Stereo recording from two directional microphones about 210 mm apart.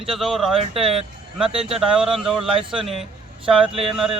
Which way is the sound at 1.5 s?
25° right (ahead or behind).